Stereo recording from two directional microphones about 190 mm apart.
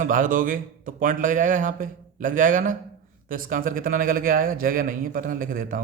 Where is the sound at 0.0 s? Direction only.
45° right (ahead or behind).